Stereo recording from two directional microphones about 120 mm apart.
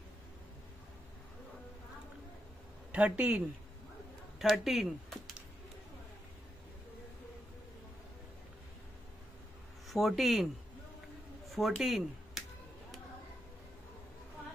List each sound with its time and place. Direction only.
2.9 s speech: 10° right (ahead or behind)
9.8 s speech: centre (ahead or behind)
11.5 s speech: centre (ahead or behind)